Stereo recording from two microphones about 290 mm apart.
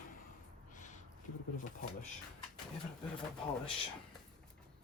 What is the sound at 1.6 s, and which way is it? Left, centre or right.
Speech, left.